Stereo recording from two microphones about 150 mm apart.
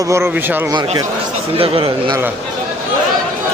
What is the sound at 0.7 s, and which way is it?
A man's voice, 30° right (ahead or behind).